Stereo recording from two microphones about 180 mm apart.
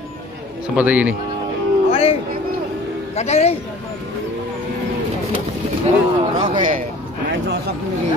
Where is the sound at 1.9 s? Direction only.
30° left (ahead or behind).